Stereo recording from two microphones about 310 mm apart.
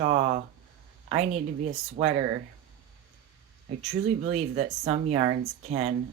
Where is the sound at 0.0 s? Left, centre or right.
Right.